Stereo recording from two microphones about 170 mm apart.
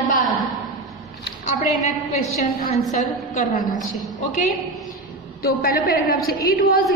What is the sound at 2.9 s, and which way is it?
A woman's voice, 50° left (ahead or behind).